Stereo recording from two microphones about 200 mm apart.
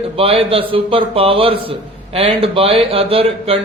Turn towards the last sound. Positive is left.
turn(degrees=-30)  # may be behind; listen again after turning